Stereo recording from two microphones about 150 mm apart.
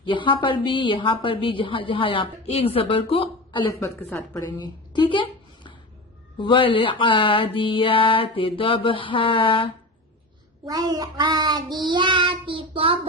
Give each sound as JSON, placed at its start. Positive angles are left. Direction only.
{"t": 0.0, "sound": "a woman's voice", "side_deg": 35}
{"t": 3.7, "sound": "a woman's voice", "side_deg": 20}
{"t": 10.7, "sound": "child singing", "side_deg": -25}